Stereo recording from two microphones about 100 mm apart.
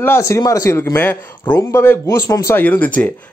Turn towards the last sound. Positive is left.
turn(degrees=15)  # may be behind; listen again after turning